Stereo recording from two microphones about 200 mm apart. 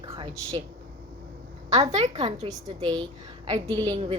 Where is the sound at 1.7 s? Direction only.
30° right (ahead or behind).